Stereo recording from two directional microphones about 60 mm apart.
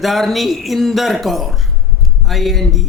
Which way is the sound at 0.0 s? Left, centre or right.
Centre.